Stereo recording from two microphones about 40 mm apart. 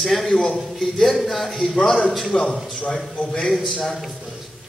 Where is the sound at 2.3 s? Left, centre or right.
Left.